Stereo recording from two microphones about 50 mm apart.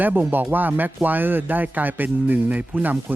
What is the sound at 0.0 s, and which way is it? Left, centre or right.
Speech, right.